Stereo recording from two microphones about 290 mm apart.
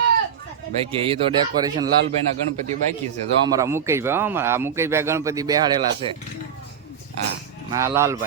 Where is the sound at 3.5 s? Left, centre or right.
Centre.